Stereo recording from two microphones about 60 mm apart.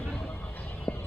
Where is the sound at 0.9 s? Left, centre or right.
Centre.